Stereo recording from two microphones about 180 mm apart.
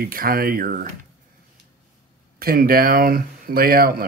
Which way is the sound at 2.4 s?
55° right (ahead or behind).